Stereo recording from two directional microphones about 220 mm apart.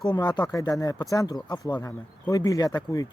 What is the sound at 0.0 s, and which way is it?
Speech, 20° left (ahead or behind).